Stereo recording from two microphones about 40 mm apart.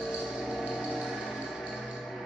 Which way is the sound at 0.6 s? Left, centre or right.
Centre.